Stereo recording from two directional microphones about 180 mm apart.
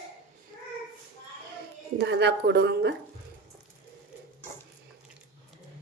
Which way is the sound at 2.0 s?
70° right (ahead or behind).